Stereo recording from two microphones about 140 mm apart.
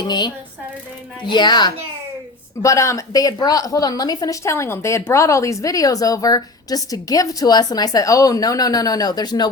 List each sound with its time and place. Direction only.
0.0 s a child's voice: 30° left (ahead or behind)
1.3 s a child's voice: 30° left (ahead or behind)
2.6 s a woman's voice: 20° left (ahead or behind)